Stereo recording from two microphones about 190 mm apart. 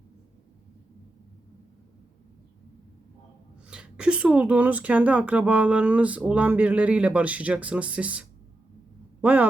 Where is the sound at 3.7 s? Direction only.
5° right (ahead or behind).